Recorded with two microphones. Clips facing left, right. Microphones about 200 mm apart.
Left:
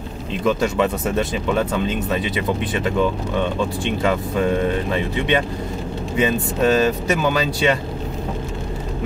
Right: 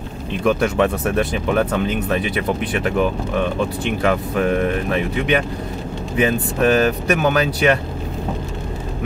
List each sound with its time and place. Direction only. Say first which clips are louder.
0.4 s speech: right 2 dB; 65° right (ahead or behind)
6.1 s speech: right 1 dB; 70° right (ahead or behind)